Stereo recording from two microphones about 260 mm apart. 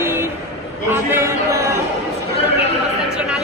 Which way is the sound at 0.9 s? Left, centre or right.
Centre.